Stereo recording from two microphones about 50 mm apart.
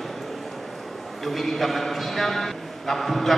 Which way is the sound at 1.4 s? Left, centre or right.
Centre.